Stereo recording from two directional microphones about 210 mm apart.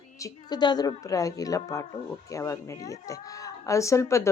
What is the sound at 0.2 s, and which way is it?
A woman's voice, 15° left (ahead or behind).